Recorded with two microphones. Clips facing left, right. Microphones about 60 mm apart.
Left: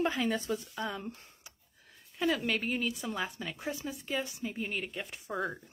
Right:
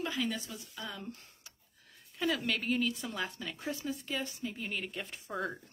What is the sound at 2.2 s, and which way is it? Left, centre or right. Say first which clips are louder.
Speech: left 2 dB; centre.